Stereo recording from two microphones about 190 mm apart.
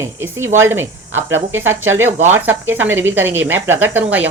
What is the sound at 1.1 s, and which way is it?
Speech, 90° right.